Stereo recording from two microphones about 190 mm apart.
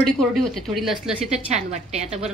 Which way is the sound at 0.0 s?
Centre (ahead or behind).